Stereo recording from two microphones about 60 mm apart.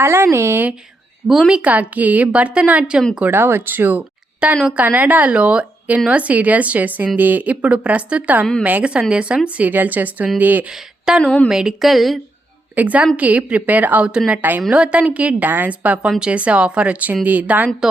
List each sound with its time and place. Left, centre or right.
0.0 s speech: right
1.5 s speech: right
3.2 s speech: right
4.4 s speech: centre
4.8 s speech: right
11.2 s a woman's voice: centre
11.4 s a woman's voice: centre
12.7 s speech: right
16.0 s speech: centre
16.3 s speech: right